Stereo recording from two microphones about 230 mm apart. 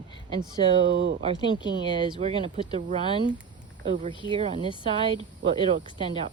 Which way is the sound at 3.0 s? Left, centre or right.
Left.